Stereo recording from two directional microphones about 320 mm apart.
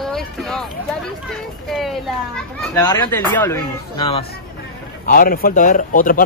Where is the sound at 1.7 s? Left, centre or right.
Centre.